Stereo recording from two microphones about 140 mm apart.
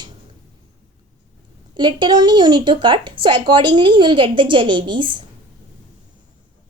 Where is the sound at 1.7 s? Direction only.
35° right (ahead or behind).